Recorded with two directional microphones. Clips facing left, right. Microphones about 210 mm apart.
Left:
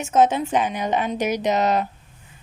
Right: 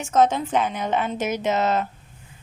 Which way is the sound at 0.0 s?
15° left (ahead or behind).